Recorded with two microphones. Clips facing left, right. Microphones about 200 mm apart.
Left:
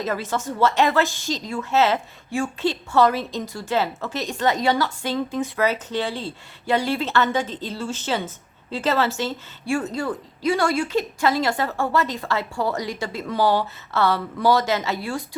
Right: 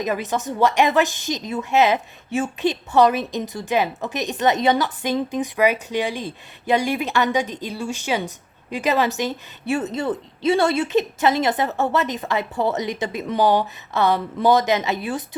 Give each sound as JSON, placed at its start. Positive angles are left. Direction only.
{"t": 0.0, "sound": "a woman's voice", "side_deg": -15}